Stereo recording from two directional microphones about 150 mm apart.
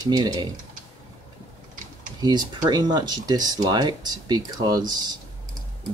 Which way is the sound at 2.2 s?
30° right (ahead or behind).